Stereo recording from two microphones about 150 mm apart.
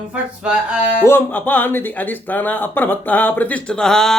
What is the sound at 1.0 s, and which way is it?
Speech, 15° left (ahead or behind).